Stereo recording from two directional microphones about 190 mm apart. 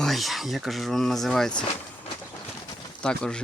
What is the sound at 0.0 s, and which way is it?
Speech, centre (ahead or behind).